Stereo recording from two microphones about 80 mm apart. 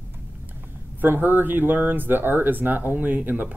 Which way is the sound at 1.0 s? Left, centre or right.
Right.